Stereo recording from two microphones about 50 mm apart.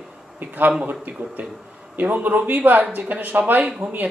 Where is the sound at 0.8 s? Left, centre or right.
Right.